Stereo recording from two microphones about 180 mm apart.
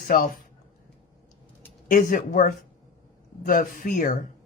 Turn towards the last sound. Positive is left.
turn(degrees=50)  # may be behind; listen again after turning